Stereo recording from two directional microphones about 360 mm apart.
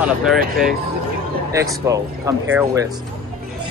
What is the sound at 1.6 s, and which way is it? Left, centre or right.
Speech, centre.